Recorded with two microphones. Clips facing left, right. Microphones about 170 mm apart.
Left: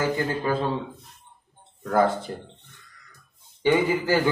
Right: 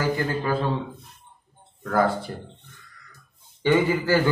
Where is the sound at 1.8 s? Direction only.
20° left (ahead or behind).